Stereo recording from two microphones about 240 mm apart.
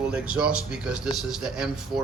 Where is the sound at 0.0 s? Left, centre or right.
Centre.